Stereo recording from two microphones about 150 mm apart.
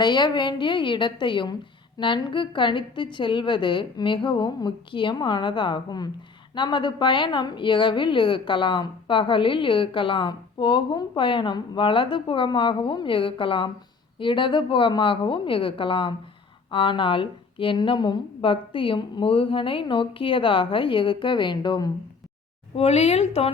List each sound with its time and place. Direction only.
0.0 s a woman's voice: 30° left (ahead or behind)
22.7 s a woman's voice: 45° left (ahead or behind)